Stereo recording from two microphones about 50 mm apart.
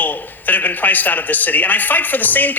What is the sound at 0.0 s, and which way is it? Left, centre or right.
Speech, left.